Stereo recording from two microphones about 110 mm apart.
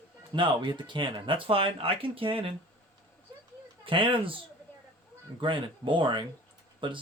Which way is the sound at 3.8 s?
50° right (ahead or behind).